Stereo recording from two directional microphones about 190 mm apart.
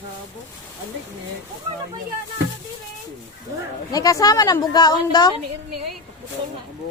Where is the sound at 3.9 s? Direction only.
20° left (ahead or behind).